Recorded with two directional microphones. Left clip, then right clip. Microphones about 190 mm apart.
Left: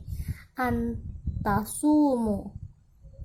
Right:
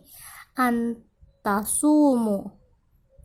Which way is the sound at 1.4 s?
30° right (ahead or behind).